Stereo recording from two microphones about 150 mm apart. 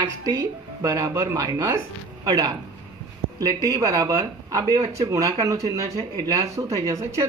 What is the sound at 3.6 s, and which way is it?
Speech, 20° right (ahead or behind).